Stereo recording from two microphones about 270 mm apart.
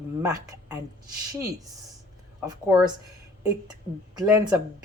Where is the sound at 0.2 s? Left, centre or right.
Centre.